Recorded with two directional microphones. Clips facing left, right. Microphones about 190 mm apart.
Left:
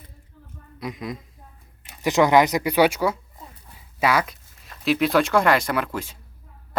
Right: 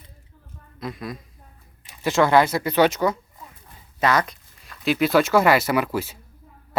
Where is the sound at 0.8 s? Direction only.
15° left (ahead or behind).